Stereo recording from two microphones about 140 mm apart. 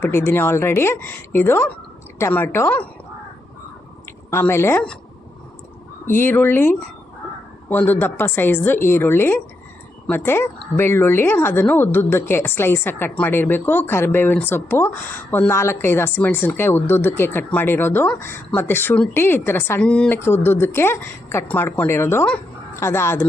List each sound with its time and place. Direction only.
0.0 s speech: 15° left (ahead or behind)
4.3 s speech: 20° left (ahead or behind)
6.1 s speech: 15° left (ahead or behind)